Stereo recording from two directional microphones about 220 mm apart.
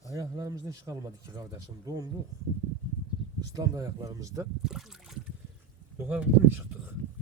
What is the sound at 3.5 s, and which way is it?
Speech, 15° right (ahead or behind).